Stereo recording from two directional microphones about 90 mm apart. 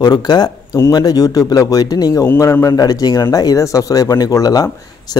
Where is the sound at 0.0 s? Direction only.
50° left (ahead or behind).